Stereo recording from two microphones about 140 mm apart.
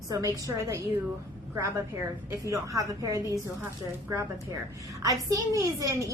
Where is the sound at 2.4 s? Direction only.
25° right (ahead or behind).